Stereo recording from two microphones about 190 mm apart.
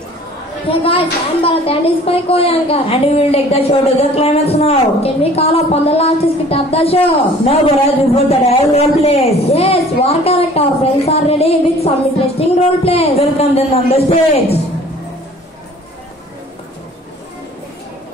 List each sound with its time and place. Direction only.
0.7 s a woman's voice: 30° left (ahead or behind)